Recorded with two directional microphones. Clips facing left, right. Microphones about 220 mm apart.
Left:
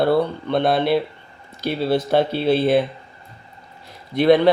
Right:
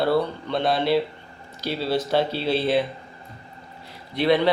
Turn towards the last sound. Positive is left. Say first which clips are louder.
# left 6 dB
turn(degrees=50)  # may be behind; listen again after turning